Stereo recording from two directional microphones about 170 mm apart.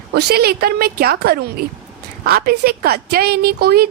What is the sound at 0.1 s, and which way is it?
A woman's voice, 70° right (ahead or behind).